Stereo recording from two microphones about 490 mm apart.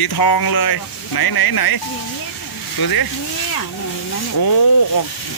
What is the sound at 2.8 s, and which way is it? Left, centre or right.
Speech, left.